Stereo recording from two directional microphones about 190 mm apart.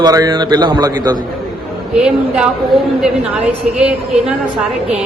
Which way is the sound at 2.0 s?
5° right (ahead or behind).